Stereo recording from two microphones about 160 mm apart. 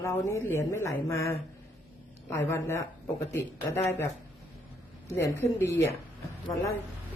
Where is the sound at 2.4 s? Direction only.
15° left (ahead or behind).